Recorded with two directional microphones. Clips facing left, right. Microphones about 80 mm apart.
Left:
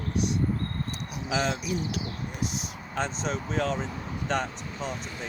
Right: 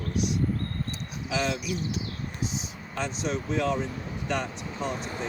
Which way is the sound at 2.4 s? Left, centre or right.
Left.